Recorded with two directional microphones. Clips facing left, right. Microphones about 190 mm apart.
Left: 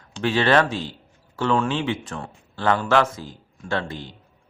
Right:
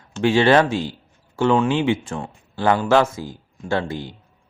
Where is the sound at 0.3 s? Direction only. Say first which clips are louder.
Right 4 dB; 30° right (ahead or behind).